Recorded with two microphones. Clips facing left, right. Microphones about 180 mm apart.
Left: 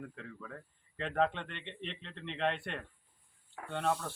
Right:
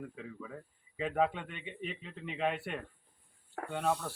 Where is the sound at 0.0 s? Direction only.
5° right (ahead or behind).